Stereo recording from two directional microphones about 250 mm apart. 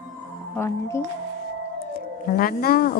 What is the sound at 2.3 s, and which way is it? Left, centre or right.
Speech, left.